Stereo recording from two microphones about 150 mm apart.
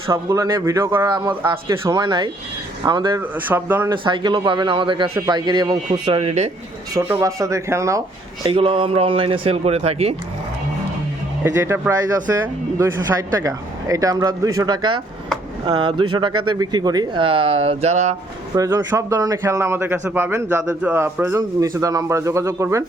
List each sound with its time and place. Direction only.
0.1 s a man's voice: 20° right (ahead or behind)
3.2 s a man's voice: 15° right (ahead or behind)
3.8 s speech: 35° right (ahead or behind)
7.1 s a man's voice: 20° right (ahead or behind)
8.4 s speech: 35° right (ahead or behind)
11.4 s a man's voice: 20° right (ahead or behind); by 18.2 s 50° right (ahead or behind)
18.5 s a man's voice: 20° right (ahead or behind)